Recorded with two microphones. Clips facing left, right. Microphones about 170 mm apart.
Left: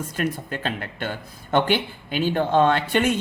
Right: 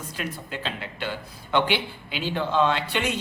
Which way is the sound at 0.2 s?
50° left (ahead or behind).